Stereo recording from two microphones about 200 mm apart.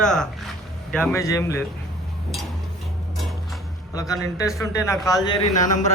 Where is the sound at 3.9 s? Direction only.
15° left (ahead or behind).